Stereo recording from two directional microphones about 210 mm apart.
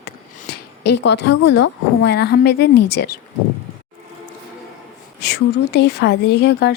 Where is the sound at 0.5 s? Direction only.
55° left (ahead or behind).